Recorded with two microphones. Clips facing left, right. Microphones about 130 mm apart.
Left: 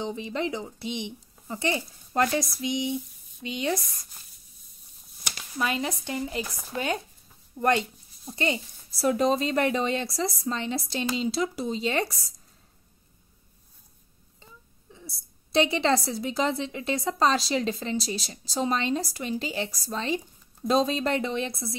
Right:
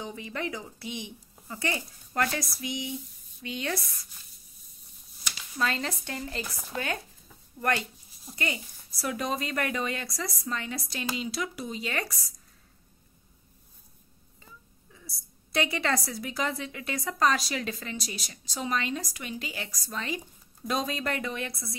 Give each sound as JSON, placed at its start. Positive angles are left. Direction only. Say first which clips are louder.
{"t": 0.0, "sound": "a woman's voice", "louder": "left 5 dB", "side_deg": 20}
{"t": 5.6, "sound": "a woman's voice", "louder": "left 2 dB", "side_deg": 15}
{"t": 14.4, "sound": "a woman's voice", "louder": "left 1 dB", "side_deg": 25}